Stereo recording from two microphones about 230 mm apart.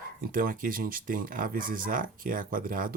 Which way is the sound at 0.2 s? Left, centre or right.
Right.